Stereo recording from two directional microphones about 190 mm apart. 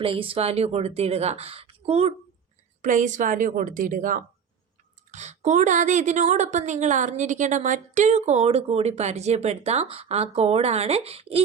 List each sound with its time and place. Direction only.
0.0 s a woman's voice: 30° right (ahead or behind)
2.8 s a woman's voice: 40° right (ahead or behind)